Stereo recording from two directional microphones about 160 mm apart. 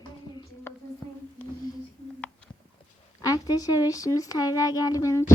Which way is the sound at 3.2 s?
25° left (ahead or behind).